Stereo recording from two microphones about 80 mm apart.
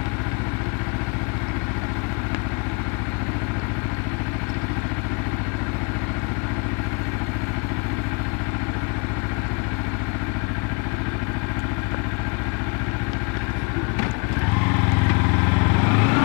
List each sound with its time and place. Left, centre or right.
15.6 s vehicle: left